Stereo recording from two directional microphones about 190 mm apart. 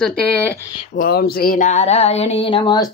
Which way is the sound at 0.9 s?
55° left (ahead or behind).